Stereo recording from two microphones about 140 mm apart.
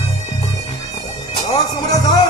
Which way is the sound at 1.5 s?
30° left (ahead or behind).